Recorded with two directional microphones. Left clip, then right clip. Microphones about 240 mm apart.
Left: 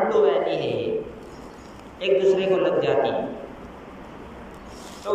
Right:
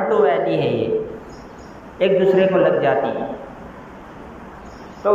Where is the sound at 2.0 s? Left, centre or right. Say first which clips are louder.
Right 5 dB; right.